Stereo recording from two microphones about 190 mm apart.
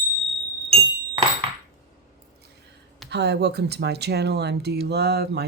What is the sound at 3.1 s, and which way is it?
Speech, 60° right (ahead or behind).